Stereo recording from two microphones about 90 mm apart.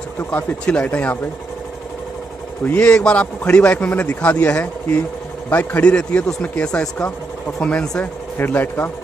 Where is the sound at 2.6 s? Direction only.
15° left (ahead or behind).